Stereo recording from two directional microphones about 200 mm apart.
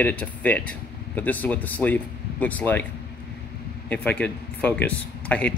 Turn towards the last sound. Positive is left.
turn(degrees=5)  # may be behind; listen again after turning